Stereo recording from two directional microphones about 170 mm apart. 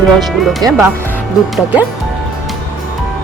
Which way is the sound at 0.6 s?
25° right (ahead or behind).